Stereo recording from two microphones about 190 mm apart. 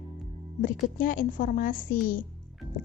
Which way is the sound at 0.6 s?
45° left (ahead or behind).